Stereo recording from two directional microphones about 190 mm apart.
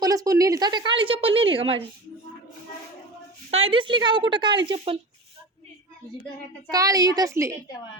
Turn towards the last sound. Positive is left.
turn(degrees=-15)  # may be behind; listen again after turning